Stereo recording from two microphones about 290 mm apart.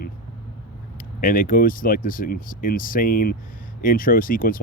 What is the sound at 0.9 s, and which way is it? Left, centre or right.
Speech, left.